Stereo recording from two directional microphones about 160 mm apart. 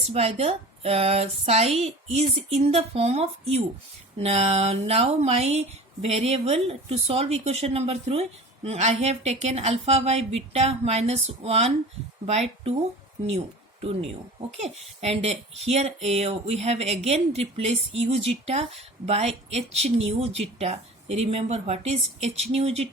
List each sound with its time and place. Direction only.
0.1 s speech: 40° right (ahead or behind)
14.6 s speech: 40° right (ahead or behind)